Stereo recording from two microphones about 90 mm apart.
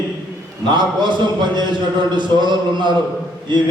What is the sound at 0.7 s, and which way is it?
Speech, 55° right (ahead or behind).